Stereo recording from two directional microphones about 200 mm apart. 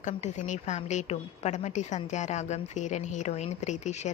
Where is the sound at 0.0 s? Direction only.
40° left (ahead or behind).